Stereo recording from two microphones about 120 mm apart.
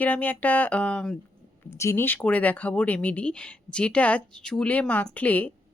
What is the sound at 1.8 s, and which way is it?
Speech, 20° left (ahead or behind).